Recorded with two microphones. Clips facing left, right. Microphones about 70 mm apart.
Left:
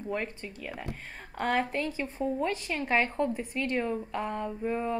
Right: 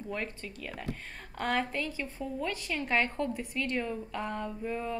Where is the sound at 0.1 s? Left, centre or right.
Centre.